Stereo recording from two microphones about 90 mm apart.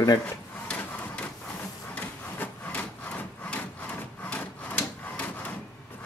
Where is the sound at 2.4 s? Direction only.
15° left (ahead or behind).